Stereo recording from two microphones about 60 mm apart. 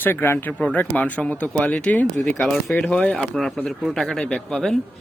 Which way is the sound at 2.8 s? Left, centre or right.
Left.